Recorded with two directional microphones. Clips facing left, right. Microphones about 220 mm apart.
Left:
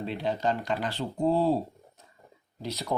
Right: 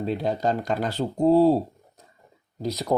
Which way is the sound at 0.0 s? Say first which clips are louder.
Right 4 dB; 40° right (ahead or behind).